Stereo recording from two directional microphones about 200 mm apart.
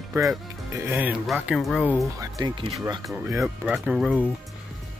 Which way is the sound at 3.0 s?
Centre (ahead or behind).